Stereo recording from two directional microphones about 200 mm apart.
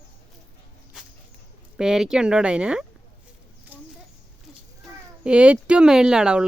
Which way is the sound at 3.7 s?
10° right (ahead or behind).